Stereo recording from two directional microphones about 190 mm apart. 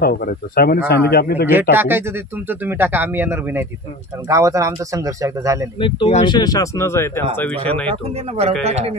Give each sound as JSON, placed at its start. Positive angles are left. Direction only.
{"t": 0.0, "sound": "a man's voice", "side_deg": 55}
{"t": 1.5, "sound": "speech", "side_deg": -10}
{"t": 5.8, "sound": "speech", "side_deg": 25}
{"t": 7.9, "sound": "speech", "side_deg": -35}